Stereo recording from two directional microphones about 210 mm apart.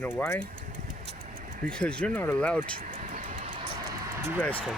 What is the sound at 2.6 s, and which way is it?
Vehicle, 35° right (ahead or behind).